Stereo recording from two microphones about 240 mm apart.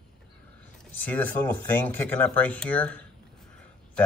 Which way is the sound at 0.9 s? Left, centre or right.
Centre.